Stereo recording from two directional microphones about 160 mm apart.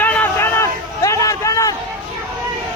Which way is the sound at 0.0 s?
10° left (ahead or behind).